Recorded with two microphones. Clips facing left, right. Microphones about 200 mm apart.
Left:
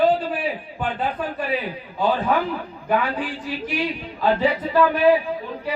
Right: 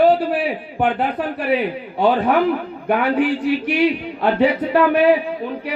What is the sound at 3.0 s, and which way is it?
A man's voice, 65° right (ahead or behind).